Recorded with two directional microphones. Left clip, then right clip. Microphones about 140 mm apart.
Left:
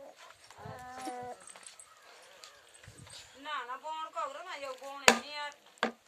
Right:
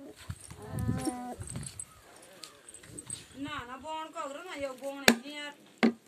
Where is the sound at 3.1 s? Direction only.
20° left (ahead or behind).